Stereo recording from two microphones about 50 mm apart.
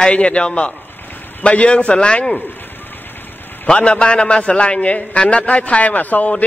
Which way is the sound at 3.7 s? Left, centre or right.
Left.